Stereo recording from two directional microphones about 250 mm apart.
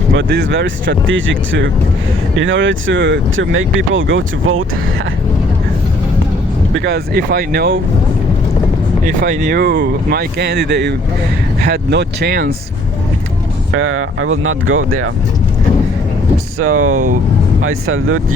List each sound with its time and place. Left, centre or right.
0.2 s speech: right
6.7 s speech: right
9.0 s speech: right
9.6 s speech: right
13.7 s speech: right
16.6 s speech: right